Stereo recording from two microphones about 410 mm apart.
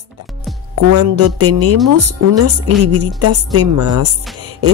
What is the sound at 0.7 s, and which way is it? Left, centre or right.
A woman's voice, right.